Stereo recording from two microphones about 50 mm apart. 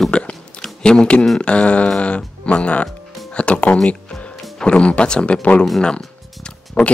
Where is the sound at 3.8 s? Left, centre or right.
Left.